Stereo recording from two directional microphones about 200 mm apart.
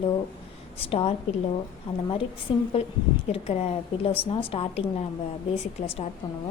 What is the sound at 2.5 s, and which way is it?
A woman's voice, 25° left (ahead or behind).